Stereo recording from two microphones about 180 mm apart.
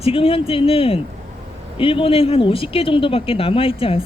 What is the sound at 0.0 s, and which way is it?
Speech, 30° left (ahead or behind).